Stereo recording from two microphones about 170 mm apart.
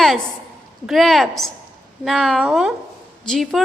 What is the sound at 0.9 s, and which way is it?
A woman's voice, centre (ahead or behind).